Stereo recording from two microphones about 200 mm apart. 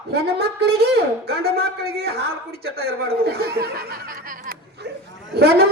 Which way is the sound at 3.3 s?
50° right (ahead or behind).